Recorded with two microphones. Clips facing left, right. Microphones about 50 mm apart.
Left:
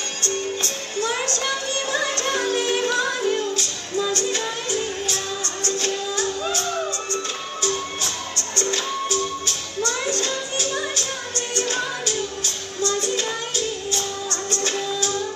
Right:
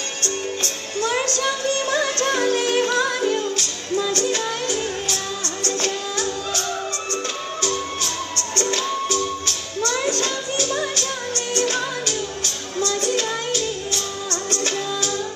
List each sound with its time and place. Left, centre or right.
0.2 s music: right
1.3 s speech: left
2.0 s music: left
2.2 s music: right
8.4 s music: right
13.0 s music: right
14.3 s music: right